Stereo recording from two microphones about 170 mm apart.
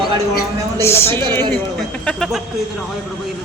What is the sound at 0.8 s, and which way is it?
Speech, 15° left (ahead or behind).